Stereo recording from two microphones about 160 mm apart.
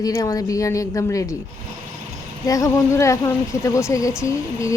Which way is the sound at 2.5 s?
20° left (ahead or behind).